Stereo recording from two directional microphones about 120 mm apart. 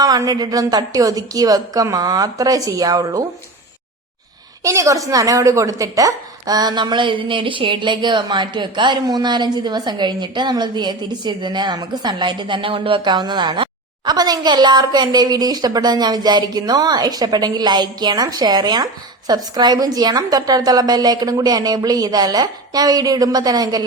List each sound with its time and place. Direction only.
0.0 s speech: 30° right (ahead or behind)
4.6 s speech: 25° right (ahead or behind)